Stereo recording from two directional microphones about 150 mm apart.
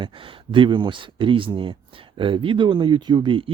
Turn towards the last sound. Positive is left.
turn(degrees=-35)  # may be behind; listen again after turning